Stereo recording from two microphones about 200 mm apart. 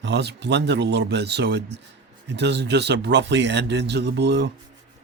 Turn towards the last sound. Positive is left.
turn(degrees=-60)  # may be behind; listen again after turning